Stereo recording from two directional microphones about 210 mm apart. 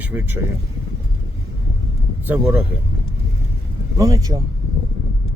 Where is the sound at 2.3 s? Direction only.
5° right (ahead or behind).